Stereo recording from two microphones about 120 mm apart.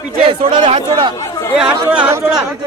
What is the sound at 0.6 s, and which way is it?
Speech, 60° right (ahead or behind).